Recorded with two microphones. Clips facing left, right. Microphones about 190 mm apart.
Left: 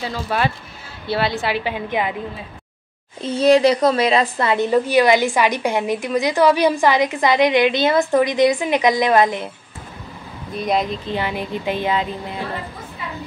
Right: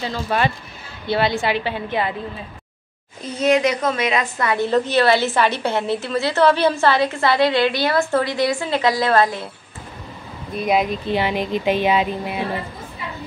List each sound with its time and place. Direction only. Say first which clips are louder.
0.0 s a woman's voice: right 1 dB; 5° left (ahead or behind)
1.6 s a woman's voice: left 1 dB; 15° left (ahead or behind)
3.3 s a woman's voice: left 4 dB; 30° left (ahead or behind)
4.6 s a woman's voice: left 2 dB; 10° left (ahead or behind)
10.5 s speech: right 1 dB; 5° right (ahead or behind)